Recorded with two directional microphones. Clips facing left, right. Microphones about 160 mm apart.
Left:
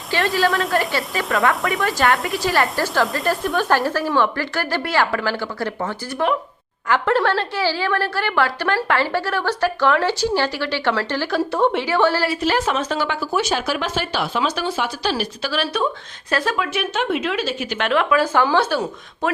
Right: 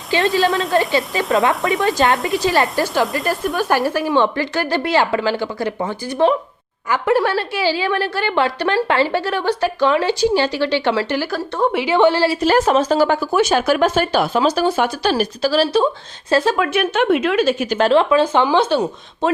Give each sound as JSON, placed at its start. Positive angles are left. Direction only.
{"t": 0.3, "sound": "a woman's voice", "side_deg": -20}
{"t": 3.1, "sound": "speech", "side_deg": 0}
{"t": 3.7, "sound": "a woman's voice", "side_deg": -10}
{"t": 11.3, "sound": "speech", "side_deg": 0}
{"t": 11.9, "sound": "a woman's voice", "side_deg": -20}
{"t": 12.4, "sound": "a woman's voice", "side_deg": -45}
{"t": 16.6, "sound": "speech", "side_deg": -55}